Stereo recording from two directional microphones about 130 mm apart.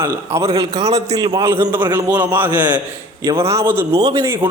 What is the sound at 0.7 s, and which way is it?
Speech, 55° right (ahead or behind).